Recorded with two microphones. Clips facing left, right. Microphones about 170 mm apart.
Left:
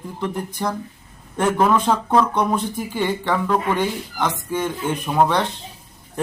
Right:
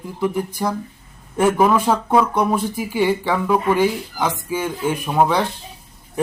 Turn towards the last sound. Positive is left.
turn(degrees=-5)  # may be behind; listen again after turning